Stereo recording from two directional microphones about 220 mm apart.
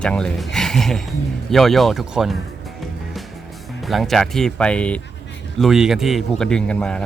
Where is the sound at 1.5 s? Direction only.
Centre (ahead or behind).